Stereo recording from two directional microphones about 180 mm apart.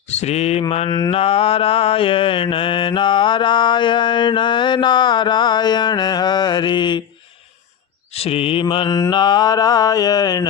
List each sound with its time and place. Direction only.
0.1 s mantra: 35° left (ahead or behind)
8.1 s mantra: 35° left (ahead or behind)